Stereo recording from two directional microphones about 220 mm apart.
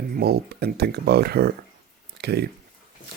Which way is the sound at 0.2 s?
45° right (ahead or behind).